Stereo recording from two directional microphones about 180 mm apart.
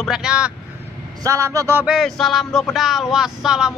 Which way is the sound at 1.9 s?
Centre (ahead or behind).